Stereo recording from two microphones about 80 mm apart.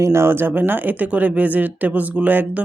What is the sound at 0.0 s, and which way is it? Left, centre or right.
Speech, right.